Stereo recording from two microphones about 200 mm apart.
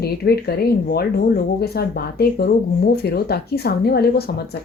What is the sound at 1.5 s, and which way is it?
Speech, 55° left (ahead or behind).